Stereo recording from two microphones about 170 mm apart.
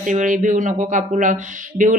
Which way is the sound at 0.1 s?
45° right (ahead or behind).